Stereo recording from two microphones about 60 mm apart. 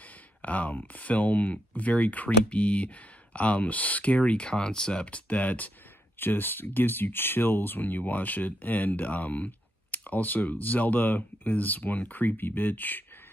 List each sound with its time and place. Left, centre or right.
0.4 s speech: left